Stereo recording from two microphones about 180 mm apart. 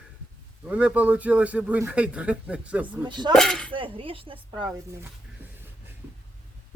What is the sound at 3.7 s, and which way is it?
Speech, 30° right (ahead or behind).